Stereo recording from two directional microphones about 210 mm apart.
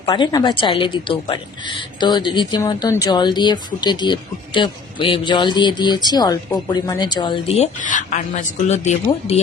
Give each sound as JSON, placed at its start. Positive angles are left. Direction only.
{"t": 0.0, "sound": "a woman's voice", "side_deg": 20}